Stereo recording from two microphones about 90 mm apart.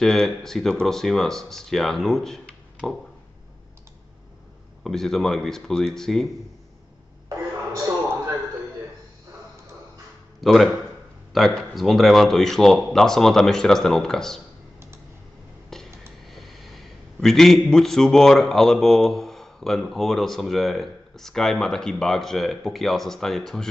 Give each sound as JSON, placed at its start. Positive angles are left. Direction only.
{"t": 0.0, "sound": "speech", "side_deg": 5}
{"t": 4.8, "sound": "speech", "side_deg": 5}
{"t": 10.4, "sound": "speech", "side_deg": 0}
{"t": 15.7, "sound": "a sound", "side_deg": 5}
{"t": 16.3, "sound": "a man's voice", "side_deg": 0}